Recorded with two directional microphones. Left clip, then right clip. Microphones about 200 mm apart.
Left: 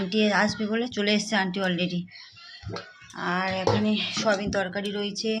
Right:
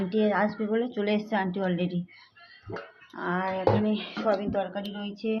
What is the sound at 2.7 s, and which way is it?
Livestock, 25° left (ahead or behind).